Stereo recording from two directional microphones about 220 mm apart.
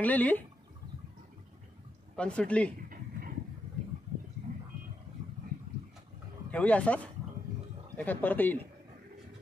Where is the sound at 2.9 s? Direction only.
40° right (ahead or behind).